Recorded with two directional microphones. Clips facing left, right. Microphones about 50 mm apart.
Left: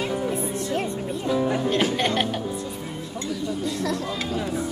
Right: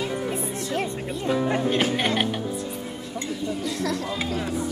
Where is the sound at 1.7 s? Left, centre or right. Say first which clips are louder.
Even; centre.